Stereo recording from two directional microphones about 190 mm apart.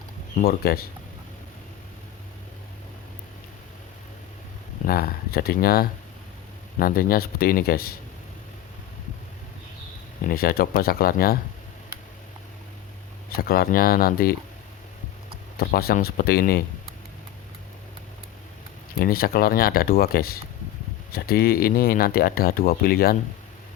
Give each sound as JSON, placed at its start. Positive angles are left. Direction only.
{"t": 0.3, "sound": "speech", "side_deg": 55}
{"t": 4.9, "sound": "speech", "side_deg": 50}
{"t": 10.2, "sound": "speech", "side_deg": 50}
{"t": 13.3, "sound": "speech", "side_deg": 55}
{"t": 15.5, "sound": "speech", "side_deg": 55}
{"t": 18.9, "sound": "speech", "side_deg": 50}